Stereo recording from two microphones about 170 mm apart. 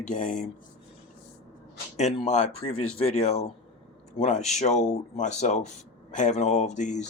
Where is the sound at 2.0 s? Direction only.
40° left (ahead or behind).